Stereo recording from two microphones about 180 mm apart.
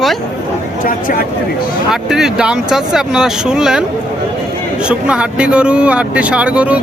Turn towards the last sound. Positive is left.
turn(degrees=-5)  # may be behind; listen again after turning